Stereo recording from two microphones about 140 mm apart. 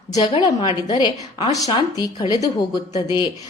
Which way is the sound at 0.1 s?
35° left (ahead or behind).